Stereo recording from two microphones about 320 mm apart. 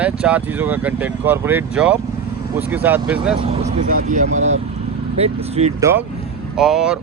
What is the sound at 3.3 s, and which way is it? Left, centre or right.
Speech, centre.